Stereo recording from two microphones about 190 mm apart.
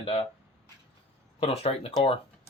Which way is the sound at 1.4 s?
30° left (ahead or behind).